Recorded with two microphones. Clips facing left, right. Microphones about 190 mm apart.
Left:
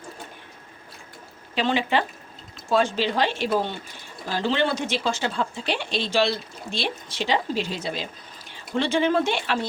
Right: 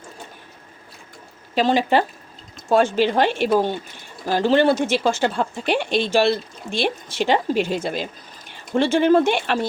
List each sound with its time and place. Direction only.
1.5 s speech: 40° right (ahead or behind)